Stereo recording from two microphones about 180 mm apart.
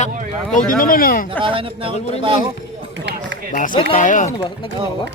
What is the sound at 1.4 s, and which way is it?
Speech, 30° right (ahead or behind).